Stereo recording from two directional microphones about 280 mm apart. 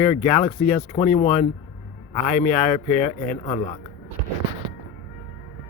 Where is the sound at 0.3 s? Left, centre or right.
Left.